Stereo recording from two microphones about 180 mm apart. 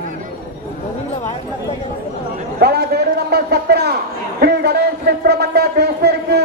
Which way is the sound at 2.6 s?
60° right (ahead or behind).